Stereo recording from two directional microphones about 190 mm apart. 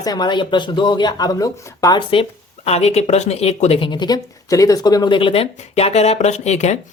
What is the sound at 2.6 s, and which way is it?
Speech, 35° left (ahead or behind).